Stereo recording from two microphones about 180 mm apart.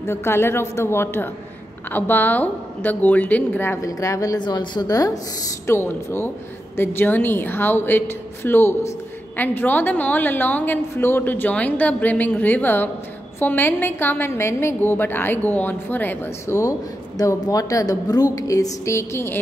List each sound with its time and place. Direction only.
0.0 s a woman's voice: 15° left (ahead or behind)